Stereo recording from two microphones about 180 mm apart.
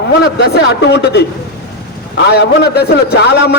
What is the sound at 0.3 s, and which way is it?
Speech, 65° left (ahead or behind).